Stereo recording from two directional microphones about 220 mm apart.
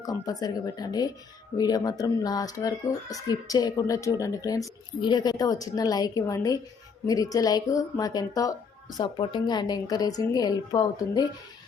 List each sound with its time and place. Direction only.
0.0 s speech: 15° left (ahead or behind)